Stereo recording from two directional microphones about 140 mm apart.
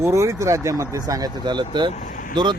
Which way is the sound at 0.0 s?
20° right (ahead or behind).